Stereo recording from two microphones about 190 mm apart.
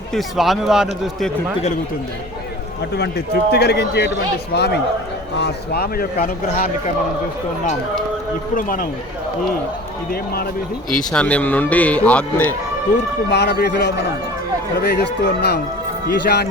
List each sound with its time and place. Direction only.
0.1 s speech: centre (ahead or behind)
2.9 s a man's voice: 60° left (ahead or behind)
8.5 s speech: 45° left (ahead or behind)
11.1 s speech: 5° left (ahead or behind)
13.3 s a man's voice: 60° left (ahead or behind)